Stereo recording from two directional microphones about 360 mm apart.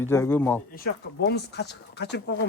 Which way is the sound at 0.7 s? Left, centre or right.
Left.